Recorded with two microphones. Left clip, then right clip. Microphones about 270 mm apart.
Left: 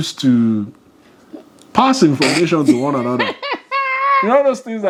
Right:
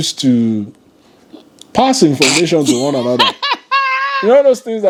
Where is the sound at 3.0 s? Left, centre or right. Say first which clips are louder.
Right 6 dB; right.